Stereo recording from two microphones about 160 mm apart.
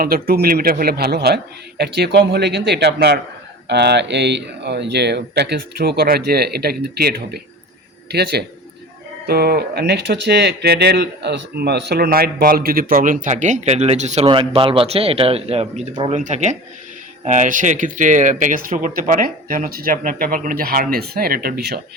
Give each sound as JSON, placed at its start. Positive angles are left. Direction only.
{"t": 0.0, "sound": "speech", "side_deg": -70}
{"t": 8.1, "sound": "speech", "side_deg": -90}
{"t": 9.2, "sound": "speech", "side_deg": -75}
{"t": 14.3, "sound": "speech", "side_deg": -30}